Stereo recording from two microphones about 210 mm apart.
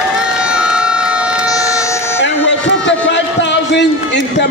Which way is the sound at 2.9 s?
60° left (ahead or behind).